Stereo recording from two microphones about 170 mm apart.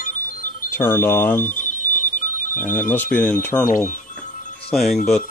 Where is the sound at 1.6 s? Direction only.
50° left (ahead or behind).